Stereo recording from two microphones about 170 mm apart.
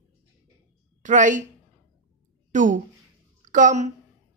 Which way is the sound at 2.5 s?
50° right (ahead or behind).